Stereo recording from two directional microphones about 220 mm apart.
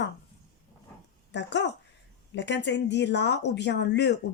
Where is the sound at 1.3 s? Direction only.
50° left (ahead or behind).